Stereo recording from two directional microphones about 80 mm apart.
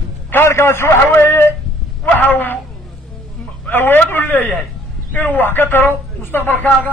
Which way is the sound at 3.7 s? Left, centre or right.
Left.